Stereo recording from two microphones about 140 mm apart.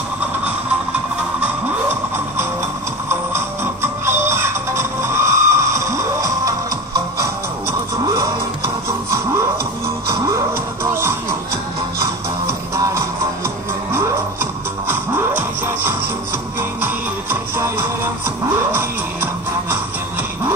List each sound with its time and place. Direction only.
3.1 s music: 20° right (ahead or behind)
12.7 s music: 20° right (ahead or behind)
19.7 s music: 15° right (ahead or behind)